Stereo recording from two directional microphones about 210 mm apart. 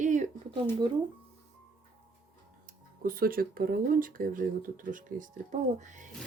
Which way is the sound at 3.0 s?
45° right (ahead or behind).